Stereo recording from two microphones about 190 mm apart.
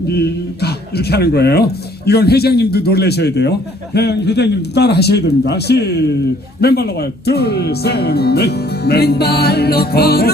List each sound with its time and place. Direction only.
0.1 s speech: 60° left (ahead or behind)